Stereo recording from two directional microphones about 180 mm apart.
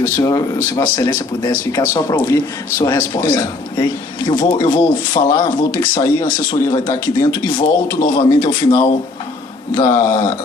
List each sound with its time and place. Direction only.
0.2 s speech: 20° left (ahead or behind)